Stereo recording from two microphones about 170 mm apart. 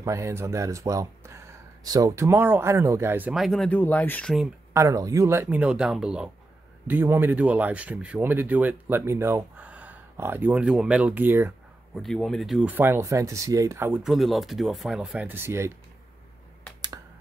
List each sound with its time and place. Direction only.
0.0 s speech: 15° right (ahead or behind); by 4.5 s 5° left (ahead or behind)
4.7 s speech: 20° right (ahead or behind)
12.0 s speech: centre (ahead or behind); by 14.0 s 15° right (ahead or behind)
14.0 s speech: centre (ahead or behind)